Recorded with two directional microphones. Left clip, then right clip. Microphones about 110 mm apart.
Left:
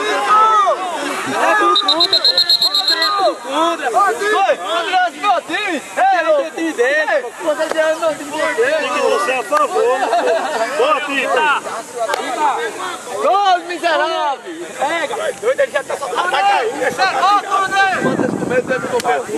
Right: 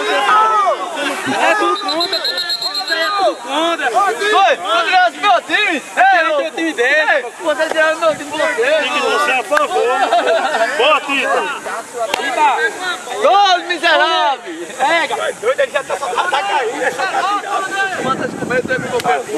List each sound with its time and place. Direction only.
0.0 s a sound: 10° right (ahead or behind)
1.7 s alarm clock: 35° right (ahead or behind)
3.0 s a sound: 15° right (ahead or behind)
7.7 s speech: 15° right (ahead or behind)
15.2 s speech: 5° right (ahead or behind)
17.0 s speech: 20° left (ahead or behind)
18.5 s speech: 10° right (ahead or behind)